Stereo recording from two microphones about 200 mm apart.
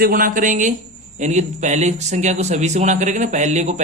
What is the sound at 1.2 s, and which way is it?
Speech, 35° right (ahead or behind).